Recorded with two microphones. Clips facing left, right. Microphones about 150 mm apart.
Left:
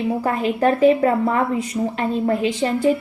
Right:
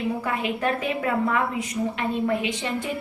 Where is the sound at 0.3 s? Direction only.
35° left (ahead or behind).